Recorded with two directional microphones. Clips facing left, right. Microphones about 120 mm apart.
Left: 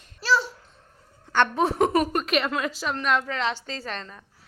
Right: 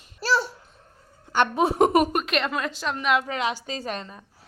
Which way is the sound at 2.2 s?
Centre (ahead or behind).